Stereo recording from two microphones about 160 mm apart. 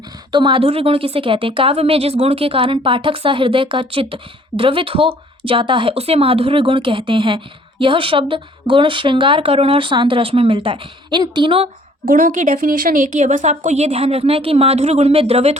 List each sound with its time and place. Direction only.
0.3 s a woman's voice: 30° right (ahead or behind)
12.0 s a woman's voice: 60° right (ahead or behind); by 15.5 s 40° right (ahead or behind)